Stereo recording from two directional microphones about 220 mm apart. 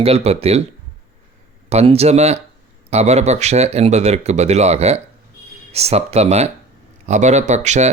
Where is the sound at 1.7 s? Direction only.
30° right (ahead or behind).